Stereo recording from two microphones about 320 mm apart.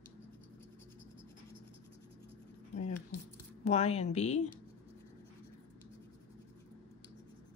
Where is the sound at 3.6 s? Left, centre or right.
Centre.